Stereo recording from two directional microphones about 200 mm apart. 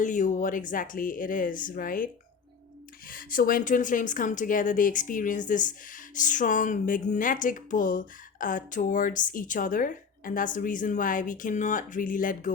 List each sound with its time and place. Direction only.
0.0 s speech: 40° left (ahead or behind)
3.1 s speech: 45° left (ahead or behind)